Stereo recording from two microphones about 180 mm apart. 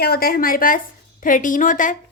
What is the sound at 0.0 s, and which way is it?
Speech, 60° left (ahead or behind).